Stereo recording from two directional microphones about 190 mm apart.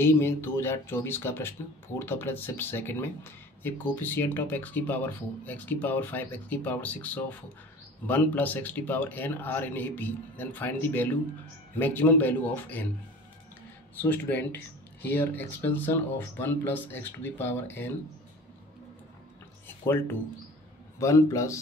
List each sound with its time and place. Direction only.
0.0 s speech: 10° left (ahead or behind)
14.0 s speech: 10° left (ahead or behind)
19.9 s speech: 10° left (ahead or behind)